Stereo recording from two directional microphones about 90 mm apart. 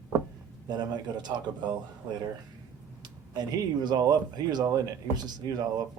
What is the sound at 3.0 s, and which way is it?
Speech, 50° right (ahead or behind).